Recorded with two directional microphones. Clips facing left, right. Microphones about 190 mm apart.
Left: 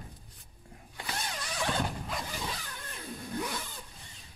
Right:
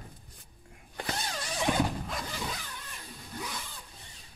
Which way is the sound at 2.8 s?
55° left (ahead or behind).